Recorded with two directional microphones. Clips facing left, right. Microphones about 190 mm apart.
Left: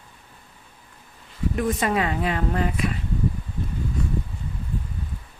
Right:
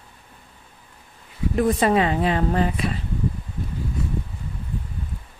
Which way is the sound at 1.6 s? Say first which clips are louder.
Right 5 dB; 30° right (ahead or behind).